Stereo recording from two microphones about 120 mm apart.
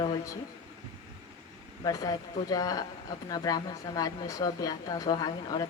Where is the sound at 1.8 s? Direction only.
30° left (ahead or behind).